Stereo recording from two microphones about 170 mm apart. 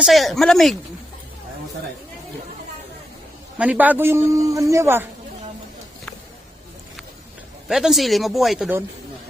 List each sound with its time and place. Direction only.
0.0 s speech: centre (ahead or behind)
3.6 s a man's voice: 10° right (ahead or behind)
7.7 s speech: centre (ahead or behind)